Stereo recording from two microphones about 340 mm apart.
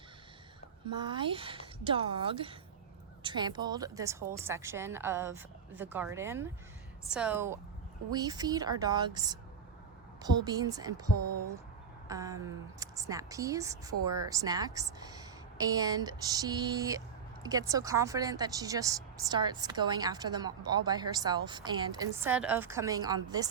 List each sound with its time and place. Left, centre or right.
0.9 s a woman's voice: centre
10.4 s speech: centre
11.3 s speech: right
12.0 s speech: centre